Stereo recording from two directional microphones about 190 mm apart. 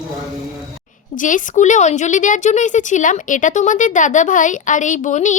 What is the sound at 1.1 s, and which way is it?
Speech, 45° left (ahead or behind).